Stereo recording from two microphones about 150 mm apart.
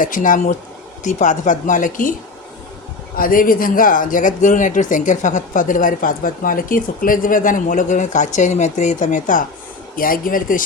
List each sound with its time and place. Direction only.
0.0 s speech: 65° left (ahead or behind)
3.2 s speech: 70° left (ahead or behind)